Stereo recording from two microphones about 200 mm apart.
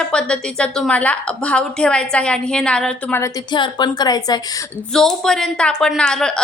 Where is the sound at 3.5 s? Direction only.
20° left (ahead or behind).